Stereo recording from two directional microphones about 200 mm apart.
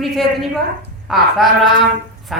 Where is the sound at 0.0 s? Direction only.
Centre (ahead or behind).